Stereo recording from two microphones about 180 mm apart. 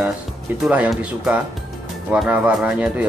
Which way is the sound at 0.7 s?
5° right (ahead or behind).